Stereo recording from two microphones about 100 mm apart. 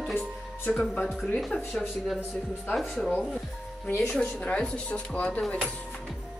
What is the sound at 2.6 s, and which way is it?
Speech, 5° left (ahead or behind).